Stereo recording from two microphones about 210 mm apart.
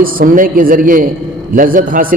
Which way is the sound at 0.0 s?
40° right (ahead or behind).